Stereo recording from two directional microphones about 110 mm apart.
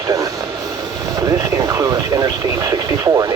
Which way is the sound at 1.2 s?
30° right (ahead or behind).